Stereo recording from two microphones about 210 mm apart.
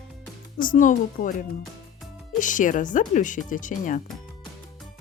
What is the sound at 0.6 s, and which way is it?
Speech, 40° left (ahead or behind).